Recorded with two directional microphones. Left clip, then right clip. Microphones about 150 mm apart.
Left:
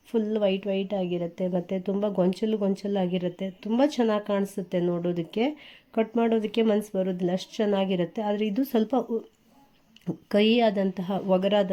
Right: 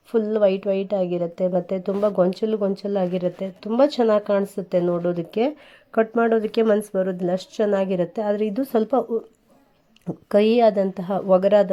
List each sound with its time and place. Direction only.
0.1 s a woman's voice: centre (ahead or behind)